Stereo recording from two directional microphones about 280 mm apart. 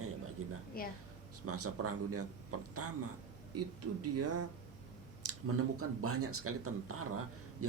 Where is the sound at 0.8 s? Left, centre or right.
Left.